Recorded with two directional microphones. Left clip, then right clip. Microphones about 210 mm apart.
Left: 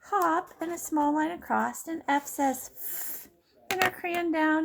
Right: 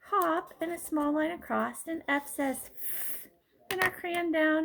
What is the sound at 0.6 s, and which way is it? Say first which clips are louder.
Speech: left 4 dB; 15° left (ahead or behind).